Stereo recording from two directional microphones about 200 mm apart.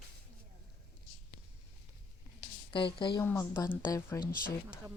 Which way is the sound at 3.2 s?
10° left (ahead or behind).